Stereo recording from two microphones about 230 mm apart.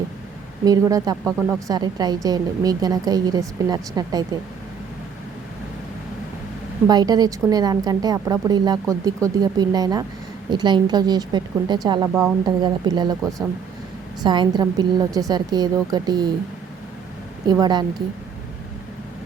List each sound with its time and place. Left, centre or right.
0.6 s a woman's voice: centre
6.8 s a woman's voice: centre
17.5 s a woman's voice: centre